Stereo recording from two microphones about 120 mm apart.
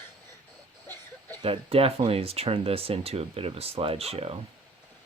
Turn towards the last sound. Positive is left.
turn(degrees=-55)  # may be behind; listen again after turning